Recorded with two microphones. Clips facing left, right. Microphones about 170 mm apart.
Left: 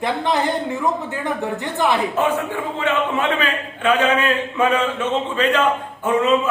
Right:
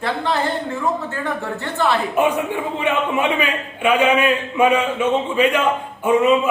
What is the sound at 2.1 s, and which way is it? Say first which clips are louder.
A man's voice: right 2 dB; 15° right (ahead or behind).